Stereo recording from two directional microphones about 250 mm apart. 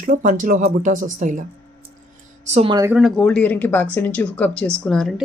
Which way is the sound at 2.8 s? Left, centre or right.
Centre.